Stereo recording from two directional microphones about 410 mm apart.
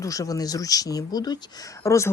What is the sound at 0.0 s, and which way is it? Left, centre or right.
Speech, centre.